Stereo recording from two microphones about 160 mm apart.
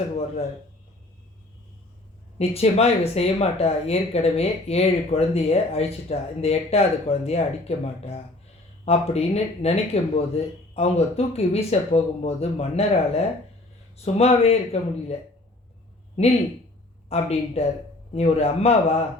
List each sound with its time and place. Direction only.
2.4 s speech: 40° left (ahead or behind)
17.1 s speech: 40° left (ahead or behind)